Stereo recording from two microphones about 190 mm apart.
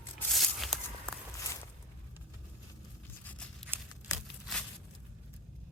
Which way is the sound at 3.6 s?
10° right (ahead or behind).